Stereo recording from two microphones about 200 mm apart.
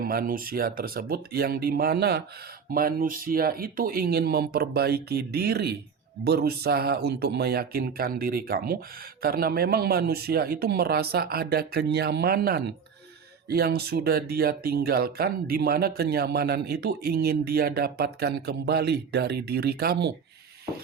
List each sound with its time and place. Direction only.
0.0 s speech: 45° right (ahead or behind)